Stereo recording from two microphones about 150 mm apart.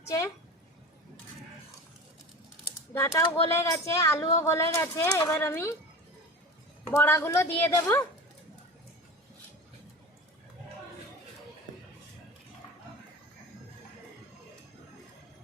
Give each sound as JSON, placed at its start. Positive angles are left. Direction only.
{"t": 2.9, "sound": "a woman's voice", "side_deg": 15}
{"t": 6.8, "sound": "a woman's voice", "side_deg": 15}